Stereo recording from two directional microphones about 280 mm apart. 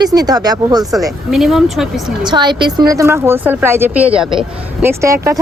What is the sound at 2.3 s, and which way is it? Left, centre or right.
Speech, centre.